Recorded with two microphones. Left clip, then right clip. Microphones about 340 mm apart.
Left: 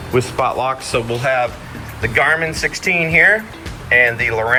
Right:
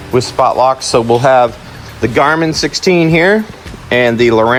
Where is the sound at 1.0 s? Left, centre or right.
Right.